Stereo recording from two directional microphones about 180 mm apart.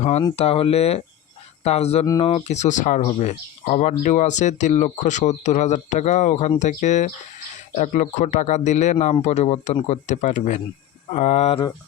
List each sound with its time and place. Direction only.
0.0 s speech: 35° left (ahead or behind)